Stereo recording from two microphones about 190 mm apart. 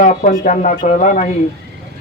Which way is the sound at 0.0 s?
50° left (ahead or behind).